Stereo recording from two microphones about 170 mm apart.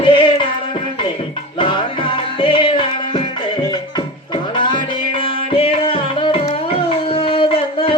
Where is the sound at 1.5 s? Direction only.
30° left (ahead or behind).